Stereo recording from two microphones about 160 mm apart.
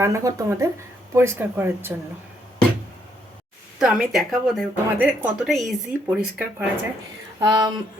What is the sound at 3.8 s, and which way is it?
Speech, 5° right (ahead or behind).